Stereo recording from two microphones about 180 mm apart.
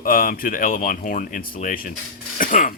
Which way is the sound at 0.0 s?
55° left (ahead or behind).